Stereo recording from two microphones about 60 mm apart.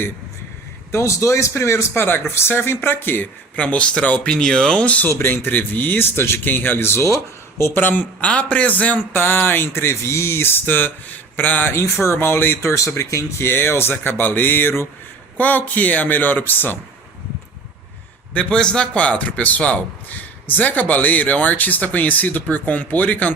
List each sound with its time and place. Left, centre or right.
0.9 s a man's voice: left
1.9 s speech: left
3.5 s speech: left
5.1 s speech: left
9.1 s speech: left
12.6 s speech: left
15.4 s speech: left
18.3 s speech: centre